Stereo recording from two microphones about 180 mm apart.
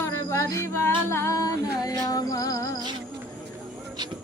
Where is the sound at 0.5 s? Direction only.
15° left (ahead or behind).